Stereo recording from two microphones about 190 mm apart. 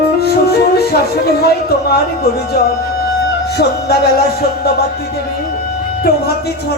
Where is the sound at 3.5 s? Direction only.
60° left (ahead or behind).